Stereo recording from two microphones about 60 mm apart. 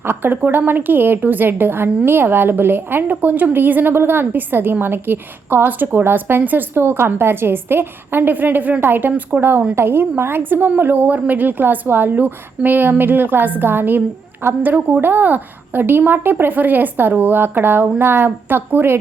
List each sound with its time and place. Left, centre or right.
0.0 s a woman's voice: right